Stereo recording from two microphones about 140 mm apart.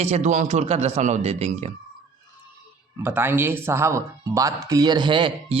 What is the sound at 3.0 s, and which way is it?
Speech, 15° right (ahead or behind).